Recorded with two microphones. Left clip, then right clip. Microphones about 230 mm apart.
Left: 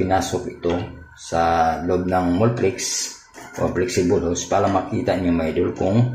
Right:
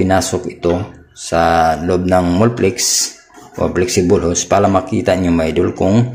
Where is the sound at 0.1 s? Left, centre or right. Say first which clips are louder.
Right 5 dB; right.